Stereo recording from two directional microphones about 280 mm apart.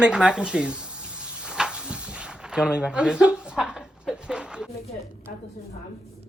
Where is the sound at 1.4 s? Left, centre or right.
Centre.